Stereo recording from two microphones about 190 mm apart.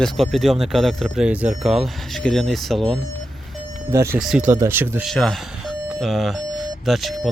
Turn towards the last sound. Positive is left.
turn(degrees=0)  # may be behind; listen again after turning